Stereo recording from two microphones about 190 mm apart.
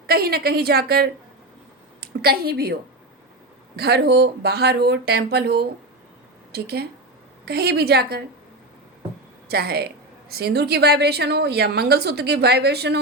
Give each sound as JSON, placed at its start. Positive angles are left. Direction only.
{"t": 0.1, "sound": "a woman's voice", "side_deg": -55}
{"t": 3.8, "sound": "a woman's voice", "side_deg": -60}
{"t": 9.5, "sound": "a woman's voice", "side_deg": -55}